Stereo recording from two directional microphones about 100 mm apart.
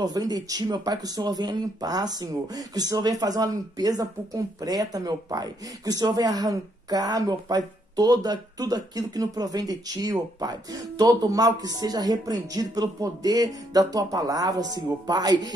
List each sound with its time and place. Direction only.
0.0 s speech: 40° right (ahead or behind)